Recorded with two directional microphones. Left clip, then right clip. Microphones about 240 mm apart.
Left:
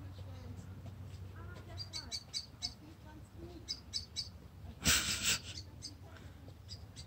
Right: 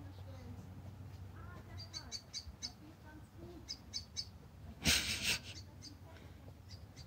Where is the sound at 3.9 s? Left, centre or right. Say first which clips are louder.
Left 2 dB; left.